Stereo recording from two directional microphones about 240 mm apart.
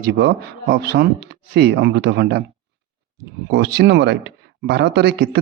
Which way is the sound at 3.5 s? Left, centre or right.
Right.